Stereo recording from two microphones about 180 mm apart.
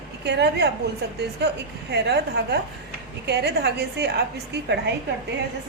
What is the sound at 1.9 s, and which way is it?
A woman's voice, 70° right (ahead or behind).